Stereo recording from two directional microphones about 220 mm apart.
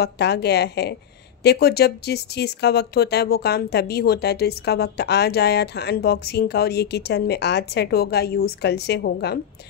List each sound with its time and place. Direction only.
0.0 s speech: 50° left (ahead or behind)